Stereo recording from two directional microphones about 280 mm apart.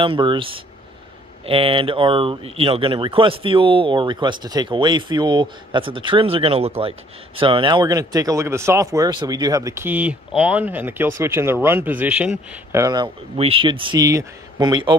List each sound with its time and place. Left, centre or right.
0.0 s speech: centre